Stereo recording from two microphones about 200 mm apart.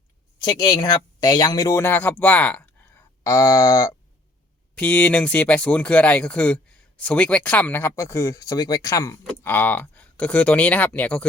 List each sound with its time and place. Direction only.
0.3 s speech: 20° left (ahead or behind)
4.8 s speech: 5° left (ahead or behind)